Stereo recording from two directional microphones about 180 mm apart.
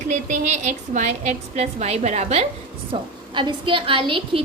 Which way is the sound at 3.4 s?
30° right (ahead or behind).